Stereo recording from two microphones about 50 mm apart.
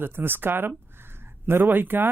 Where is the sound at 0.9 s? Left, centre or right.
Right.